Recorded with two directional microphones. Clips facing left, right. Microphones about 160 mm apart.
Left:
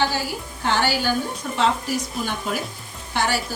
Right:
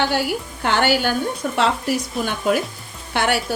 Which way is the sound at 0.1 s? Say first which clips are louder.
Right 6 dB; 65° right (ahead or behind).